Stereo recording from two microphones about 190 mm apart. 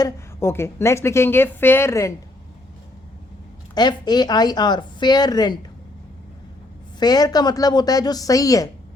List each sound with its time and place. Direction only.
0.0 s a woman's voice: 15° left (ahead or behind)
3.8 s speech: 20° left (ahead or behind)
7.0 s speech: 20° left (ahead or behind)